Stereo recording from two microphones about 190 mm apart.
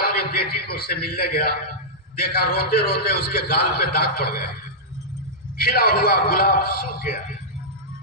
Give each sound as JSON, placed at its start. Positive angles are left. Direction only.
{"t": 0.0, "sound": "a man's voice", "side_deg": 50}
{"t": 5.5, "sound": "a man's voice", "side_deg": 55}